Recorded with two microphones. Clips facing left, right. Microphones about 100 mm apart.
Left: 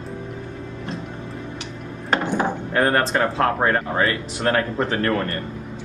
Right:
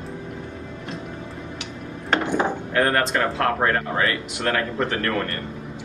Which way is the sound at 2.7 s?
25° left (ahead or behind).